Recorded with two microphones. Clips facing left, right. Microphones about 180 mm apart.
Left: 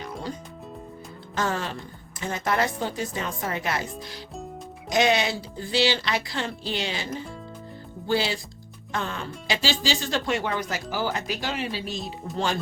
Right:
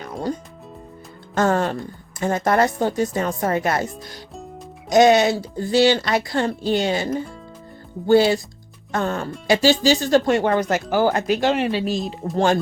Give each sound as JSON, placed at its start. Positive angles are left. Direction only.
{"t": 0.0, "sound": "music", "side_deg": -50}
{"t": 1.4, "sound": "speech", "side_deg": -50}
{"t": 12.2, "sound": "speech", "side_deg": -45}